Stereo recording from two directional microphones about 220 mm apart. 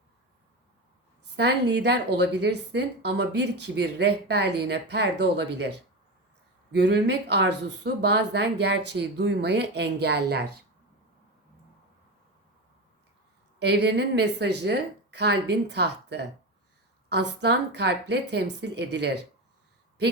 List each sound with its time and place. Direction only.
1.4 s speech: 50° right (ahead or behind)
13.6 s speech: 50° right (ahead or behind)